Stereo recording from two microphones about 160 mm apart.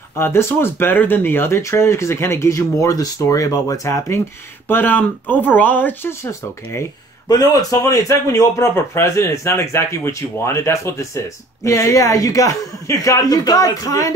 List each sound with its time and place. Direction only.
0.2 s speech: 15° left (ahead or behind)